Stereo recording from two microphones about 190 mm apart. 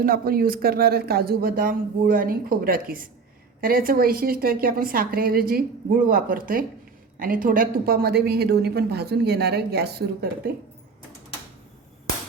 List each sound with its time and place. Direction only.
0.0 s a woman's voice: 50° right (ahead or behind)